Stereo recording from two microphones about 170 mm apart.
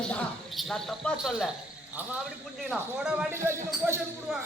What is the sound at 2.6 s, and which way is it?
Speech, 5° right (ahead or behind).